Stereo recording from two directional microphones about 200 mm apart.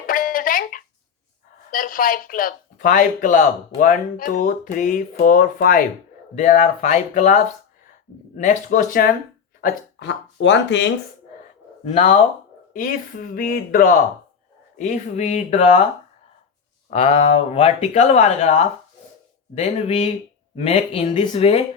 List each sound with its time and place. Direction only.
0.1 s music: 45° left (ahead or behind)
1.7 s speech: 45° left (ahead or behind)
9.6 s speech: 55° left (ahead or behind)
11.9 s speech: 35° left (ahead or behind)
16.9 s speech: 35° left (ahead or behind)